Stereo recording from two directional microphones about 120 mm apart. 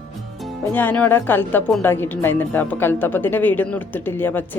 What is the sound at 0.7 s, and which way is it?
Speech, 15° left (ahead or behind).